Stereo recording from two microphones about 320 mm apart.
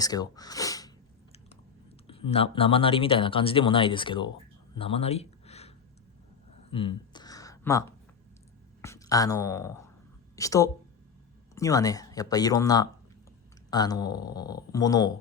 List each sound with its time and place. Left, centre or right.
0.0 s speech: centre
2.0 s speech: centre
4.7 s a sound: centre
8.8 s a woman's voice: centre